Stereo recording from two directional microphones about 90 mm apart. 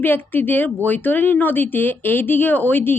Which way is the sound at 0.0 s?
20° left (ahead or behind).